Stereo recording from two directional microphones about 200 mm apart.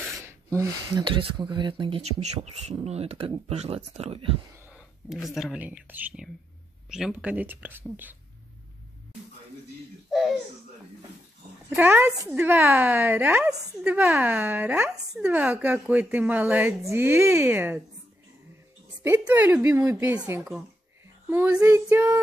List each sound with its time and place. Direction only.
0.2 s a sound: 15° right (ahead or behind)
1.0 s speech: 25° right (ahead or behind)
4.7 s a woman's voice: centre (ahead or behind)
11.7 s a woman's voice: 10° right (ahead or behind)
19.0 s a woman's voice: 10° right (ahead or behind)